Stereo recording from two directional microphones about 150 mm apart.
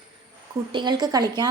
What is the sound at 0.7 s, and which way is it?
Speech, 30° right (ahead or behind).